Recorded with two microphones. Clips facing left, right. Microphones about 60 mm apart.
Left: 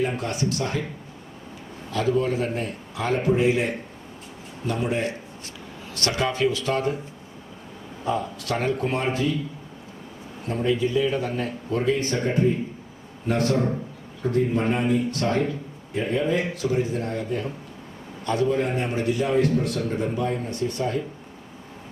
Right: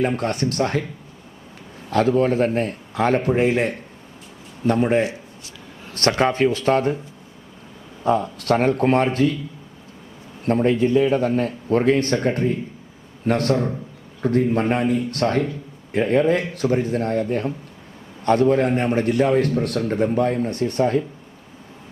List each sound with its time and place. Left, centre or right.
0.2 s a man's voice: right
1.9 s a man's voice: right
8.0 s a man's voice: right
10.4 s a man's voice: right